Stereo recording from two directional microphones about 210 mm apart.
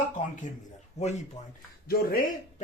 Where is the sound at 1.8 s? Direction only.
45° left (ahead or behind).